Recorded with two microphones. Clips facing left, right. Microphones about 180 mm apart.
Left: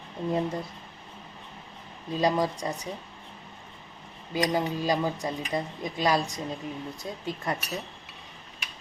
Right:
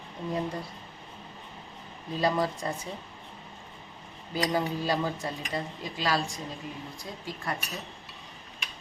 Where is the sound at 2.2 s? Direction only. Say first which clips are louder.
Left 2 dB; 15° left (ahead or behind).